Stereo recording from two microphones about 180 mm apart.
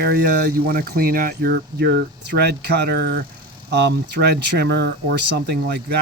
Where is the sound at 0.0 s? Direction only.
60° right (ahead or behind).